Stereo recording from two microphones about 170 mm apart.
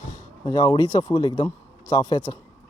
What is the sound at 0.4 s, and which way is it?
Speech, 25° left (ahead or behind).